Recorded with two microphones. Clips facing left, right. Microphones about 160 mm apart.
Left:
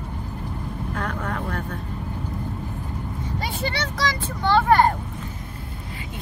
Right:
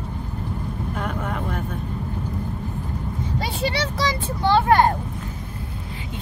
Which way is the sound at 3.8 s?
25° right (ahead or behind).